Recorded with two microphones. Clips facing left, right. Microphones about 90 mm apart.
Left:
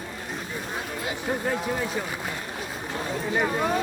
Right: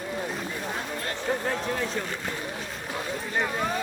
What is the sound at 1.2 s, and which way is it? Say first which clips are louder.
Speech: left 1 dB; 5° left (ahead or behind).